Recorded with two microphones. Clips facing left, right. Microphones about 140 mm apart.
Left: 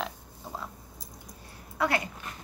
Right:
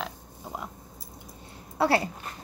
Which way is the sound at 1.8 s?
30° right (ahead or behind).